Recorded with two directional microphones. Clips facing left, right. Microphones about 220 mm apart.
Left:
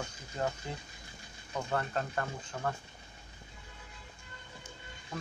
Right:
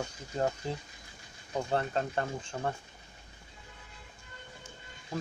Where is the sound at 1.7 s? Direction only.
25° right (ahead or behind).